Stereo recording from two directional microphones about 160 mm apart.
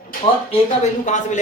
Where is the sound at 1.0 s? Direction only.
50° left (ahead or behind).